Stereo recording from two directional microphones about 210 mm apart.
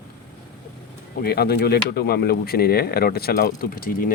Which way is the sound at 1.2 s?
50° left (ahead or behind).